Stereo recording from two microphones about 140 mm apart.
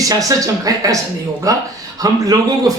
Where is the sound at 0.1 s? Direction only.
25° right (ahead or behind).